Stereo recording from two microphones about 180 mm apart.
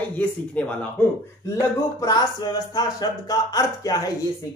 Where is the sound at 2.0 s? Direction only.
20° left (ahead or behind).